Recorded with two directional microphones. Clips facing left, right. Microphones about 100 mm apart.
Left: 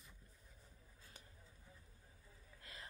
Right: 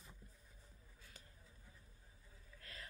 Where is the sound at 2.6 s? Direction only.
20° left (ahead or behind).